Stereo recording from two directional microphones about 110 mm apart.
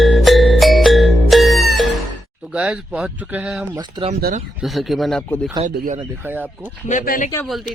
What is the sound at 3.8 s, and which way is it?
Speech, 50° right (ahead or behind).